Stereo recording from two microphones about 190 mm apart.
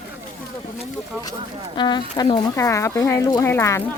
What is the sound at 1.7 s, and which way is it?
Speech, 20° left (ahead or behind).